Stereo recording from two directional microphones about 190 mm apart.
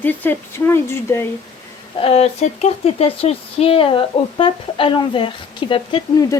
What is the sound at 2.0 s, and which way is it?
Speech, 35° left (ahead or behind).